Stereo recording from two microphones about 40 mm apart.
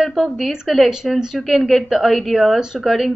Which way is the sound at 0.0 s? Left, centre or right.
Centre.